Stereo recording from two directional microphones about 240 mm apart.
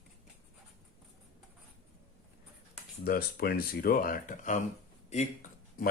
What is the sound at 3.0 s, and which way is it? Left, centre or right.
Speech, left.